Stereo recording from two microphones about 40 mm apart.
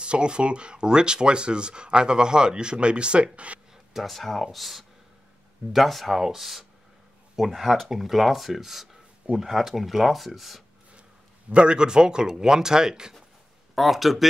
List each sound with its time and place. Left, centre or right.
0.0 s speech: right
3.7 s speech: centre
11.5 s speech: right
13.7 s speech: centre